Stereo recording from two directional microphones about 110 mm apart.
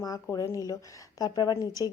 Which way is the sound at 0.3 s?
30° left (ahead or behind).